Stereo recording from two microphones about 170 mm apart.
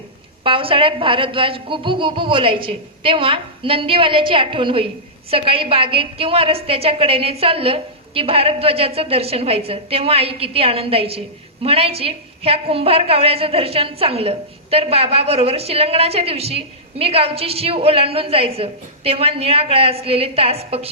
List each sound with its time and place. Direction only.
0.4 s a woman's voice: 30° right (ahead or behind)